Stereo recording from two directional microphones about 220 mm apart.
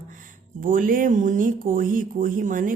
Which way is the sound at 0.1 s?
40° right (ahead or behind).